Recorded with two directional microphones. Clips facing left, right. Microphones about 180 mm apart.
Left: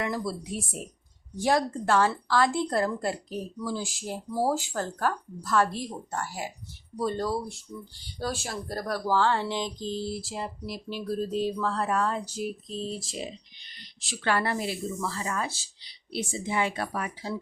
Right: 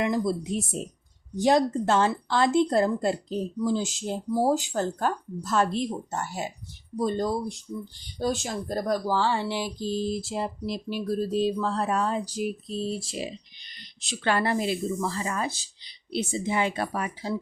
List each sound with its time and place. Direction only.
0.0 s speech: 20° right (ahead or behind)
10.8 s speech: 15° right (ahead or behind)
14.0 s speech: 20° right (ahead or behind)